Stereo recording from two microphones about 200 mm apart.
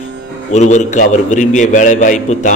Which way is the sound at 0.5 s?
35° left (ahead or behind).